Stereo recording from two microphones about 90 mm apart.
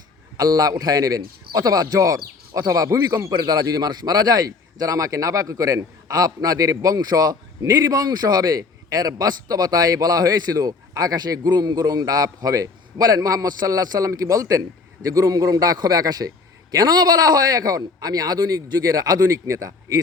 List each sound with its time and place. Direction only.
0.3 s a man's voice: 45° right (ahead or behind)